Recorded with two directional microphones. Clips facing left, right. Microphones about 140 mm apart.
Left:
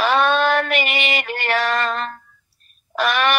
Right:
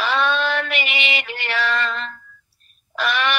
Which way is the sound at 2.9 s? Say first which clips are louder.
Left 3 dB; 50° left (ahead or behind).